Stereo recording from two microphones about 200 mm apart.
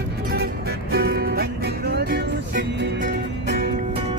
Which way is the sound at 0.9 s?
50° right (ahead or behind).